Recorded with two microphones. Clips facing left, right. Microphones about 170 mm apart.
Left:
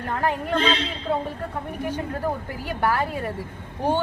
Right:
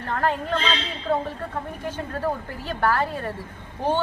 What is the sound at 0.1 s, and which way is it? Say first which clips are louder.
A woman's voice: even; 15° left (ahead or behind).